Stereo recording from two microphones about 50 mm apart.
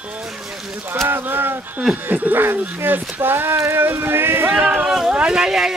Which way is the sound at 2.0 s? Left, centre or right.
Right.